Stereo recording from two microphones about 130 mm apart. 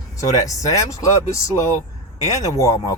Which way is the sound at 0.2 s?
25° left (ahead or behind).